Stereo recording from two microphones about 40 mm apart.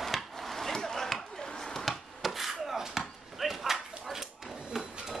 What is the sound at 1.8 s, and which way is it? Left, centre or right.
Chopping, centre.